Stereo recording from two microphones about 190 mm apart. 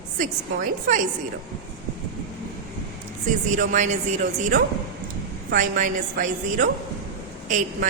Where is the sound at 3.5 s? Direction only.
40° right (ahead or behind).